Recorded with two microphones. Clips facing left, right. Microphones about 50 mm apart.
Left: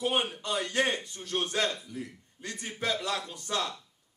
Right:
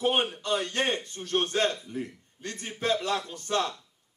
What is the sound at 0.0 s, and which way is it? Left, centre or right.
Speech, right.